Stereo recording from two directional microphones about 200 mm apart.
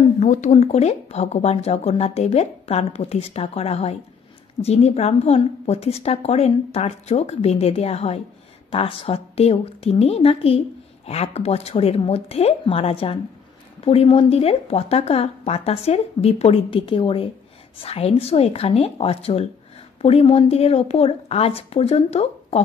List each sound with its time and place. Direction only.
0.2 s speech: 35° left (ahead or behind)